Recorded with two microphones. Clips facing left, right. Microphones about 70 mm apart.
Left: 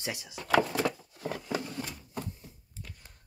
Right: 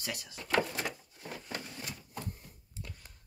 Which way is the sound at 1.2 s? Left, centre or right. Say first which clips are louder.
Left 8 dB; left.